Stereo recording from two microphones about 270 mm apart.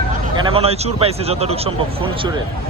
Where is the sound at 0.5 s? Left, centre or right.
Right.